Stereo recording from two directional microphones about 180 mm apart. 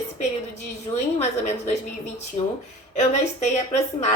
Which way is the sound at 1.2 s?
35° left (ahead or behind).